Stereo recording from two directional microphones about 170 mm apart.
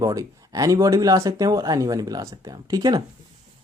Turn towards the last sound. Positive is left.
turn(degrees=-20)  # may be behind; listen again after turning